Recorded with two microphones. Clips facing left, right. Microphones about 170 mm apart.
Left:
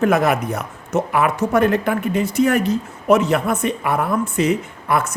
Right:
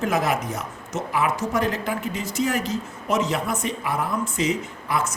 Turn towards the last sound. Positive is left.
turn(degrees=55)  # may be behind; listen again after turning